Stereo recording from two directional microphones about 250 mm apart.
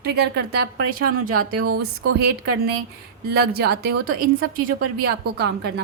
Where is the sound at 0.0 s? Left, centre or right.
Right.